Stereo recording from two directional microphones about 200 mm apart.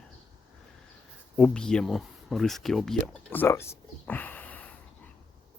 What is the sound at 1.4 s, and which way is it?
Speech, 5° left (ahead or behind).